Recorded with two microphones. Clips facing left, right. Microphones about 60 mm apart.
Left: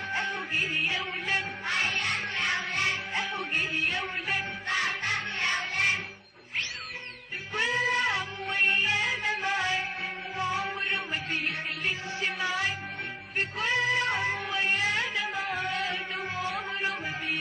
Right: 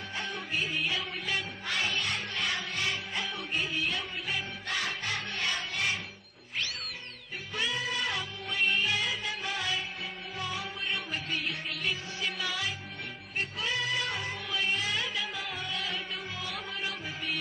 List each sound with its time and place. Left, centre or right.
0.1 s music: left
7.5 s music: left
15.5 s music: left
16.4 s music: left